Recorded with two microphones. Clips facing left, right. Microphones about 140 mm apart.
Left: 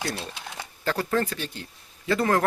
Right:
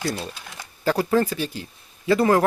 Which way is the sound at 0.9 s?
10° right (ahead or behind).